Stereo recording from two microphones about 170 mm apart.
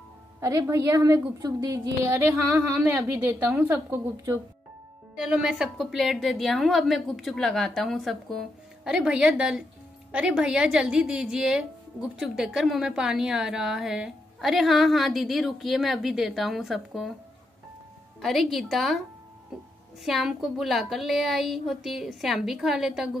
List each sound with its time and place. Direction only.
0.4 s a woman's voice: 15° right (ahead or behind)
5.1 s a woman's voice: 5° right (ahead or behind)
18.2 s a woman's voice: centre (ahead or behind)
20.0 s a woman's voice: centre (ahead or behind)